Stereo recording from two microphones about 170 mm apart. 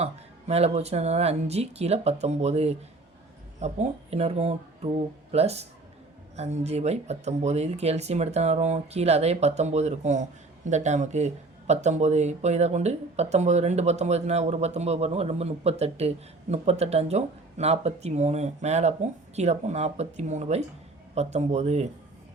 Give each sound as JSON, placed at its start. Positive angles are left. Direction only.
{"t": 0.0, "sound": "speech", "side_deg": -40}